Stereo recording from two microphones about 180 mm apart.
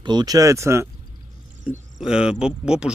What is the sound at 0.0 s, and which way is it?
Speech, 25° right (ahead or behind).